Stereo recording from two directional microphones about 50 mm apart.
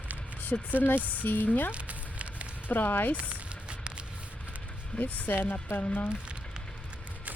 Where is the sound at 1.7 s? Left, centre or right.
Right.